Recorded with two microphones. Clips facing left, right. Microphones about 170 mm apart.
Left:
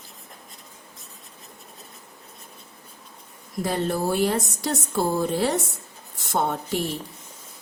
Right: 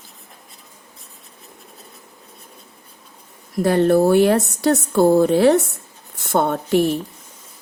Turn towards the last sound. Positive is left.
turn(degrees=-60)  # may be behind; listen again after turning